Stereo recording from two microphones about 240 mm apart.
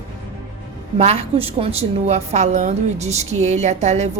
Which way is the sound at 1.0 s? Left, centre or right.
Right.